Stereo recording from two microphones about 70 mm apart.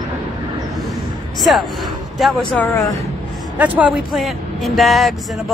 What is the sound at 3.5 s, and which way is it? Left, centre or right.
Speech, right.